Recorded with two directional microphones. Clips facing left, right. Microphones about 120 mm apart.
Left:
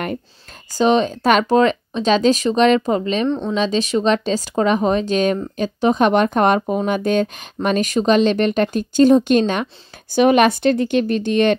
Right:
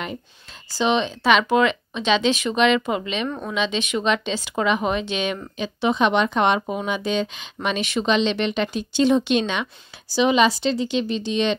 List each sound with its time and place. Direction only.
0.7 s speech: 45° left (ahead or behind)
3.3 s speech: 25° left (ahead or behind)
3.5 s speech: 40° left (ahead or behind); by 11.5 s 55° left (ahead or behind)